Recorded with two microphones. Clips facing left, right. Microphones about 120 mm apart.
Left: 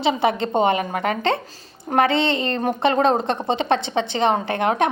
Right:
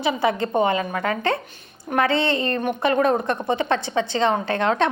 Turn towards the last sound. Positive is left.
turn(degrees=20)  # may be behind; listen again after turning